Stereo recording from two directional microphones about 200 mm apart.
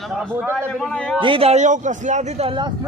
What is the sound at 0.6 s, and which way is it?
Speech, 5° left (ahead or behind).